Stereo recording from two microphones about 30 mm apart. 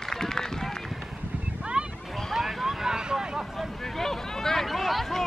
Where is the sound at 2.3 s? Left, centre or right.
Centre.